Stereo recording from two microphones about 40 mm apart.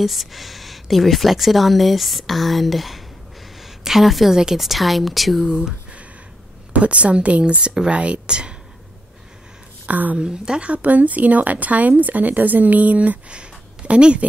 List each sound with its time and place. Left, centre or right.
0.0 s speech: centre
3.6 s a sound: centre
4.6 s speech: centre
6.7 s speech: right
9.8 s speech: right
10.1 s speech: right
10.6 s speech: right
13.3 s a sound: right